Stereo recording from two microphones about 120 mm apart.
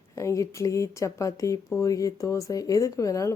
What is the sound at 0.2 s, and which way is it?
Speech, 25° left (ahead or behind).